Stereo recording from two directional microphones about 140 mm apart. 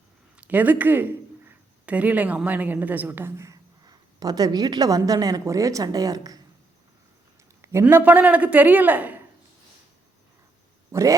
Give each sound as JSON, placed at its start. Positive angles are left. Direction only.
{"t": 0.3, "sound": "speech", "side_deg": -10}
{"t": 7.6, "sound": "a man's voice", "side_deg": -20}
{"t": 10.9, "sound": "speech", "side_deg": -20}